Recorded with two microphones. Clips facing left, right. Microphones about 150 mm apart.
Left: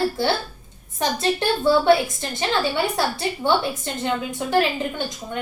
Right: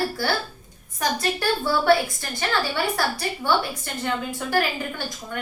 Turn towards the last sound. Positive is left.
turn(degrees=20)  # may be behind; listen again after turning